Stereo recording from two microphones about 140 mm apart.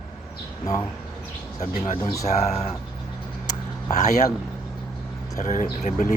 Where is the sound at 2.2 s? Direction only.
50° left (ahead or behind).